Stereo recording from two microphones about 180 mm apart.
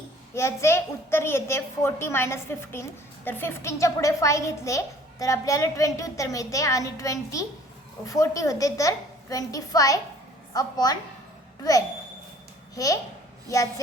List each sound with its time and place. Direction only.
0.3 s a woman's voice: 15° left (ahead or behind)
12.7 s a child's voice: 20° left (ahead or behind)